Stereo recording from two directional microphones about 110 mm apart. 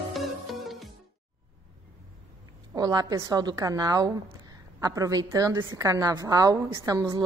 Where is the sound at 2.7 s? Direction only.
35° right (ahead or behind).